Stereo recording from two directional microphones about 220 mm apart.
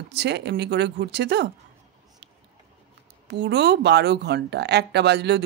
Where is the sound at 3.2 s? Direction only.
50° right (ahead or behind).